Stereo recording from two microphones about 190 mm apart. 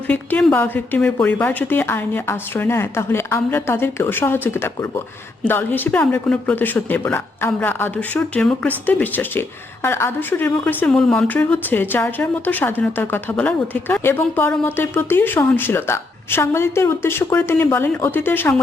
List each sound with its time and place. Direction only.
0.1 s speech: 10° left (ahead or behind)